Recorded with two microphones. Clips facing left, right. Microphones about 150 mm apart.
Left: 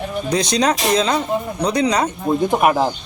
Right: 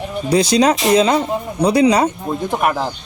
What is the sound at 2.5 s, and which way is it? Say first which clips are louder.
Speech: left 2 dB; 10° left (ahead or behind).